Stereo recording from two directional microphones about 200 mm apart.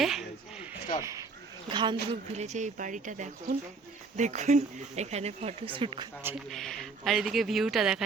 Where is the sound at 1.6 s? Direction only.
25° right (ahead or behind).